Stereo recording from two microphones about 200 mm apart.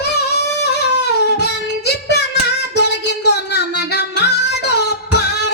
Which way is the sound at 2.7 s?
55° left (ahead or behind).